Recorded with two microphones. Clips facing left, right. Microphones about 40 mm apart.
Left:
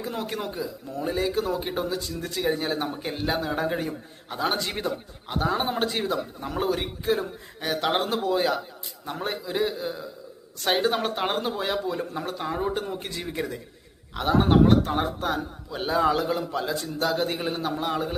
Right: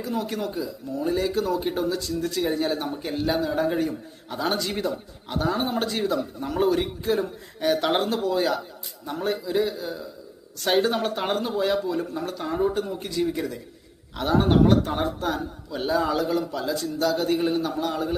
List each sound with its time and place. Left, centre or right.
0.0 s a man's voice: left; by 8.5 s centre
9.0 s a man's voice: left
12.5 s a man's voice: centre
12.7 s speech: left
14.2 s a man's voice: centre
16.5 s speech: left